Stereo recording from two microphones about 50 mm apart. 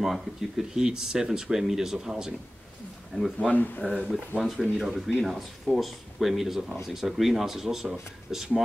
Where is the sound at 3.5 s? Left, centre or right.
Left.